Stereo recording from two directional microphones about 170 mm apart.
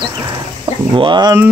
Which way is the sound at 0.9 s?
30° right (ahead or behind).